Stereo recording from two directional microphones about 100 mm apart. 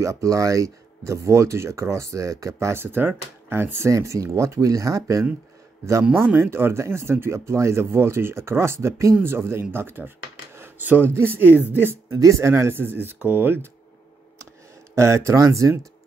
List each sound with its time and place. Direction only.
0.0 s speech: 35° right (ahead or behind)
6.1 s speech: 25° right (ahead or behind)
12.2 s speech: 30° right (ahead or behind)
15.0 s speech: 30° right (ahead or behind)